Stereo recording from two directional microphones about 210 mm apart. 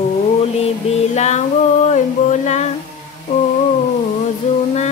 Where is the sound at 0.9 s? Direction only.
30° left (ahead or behind).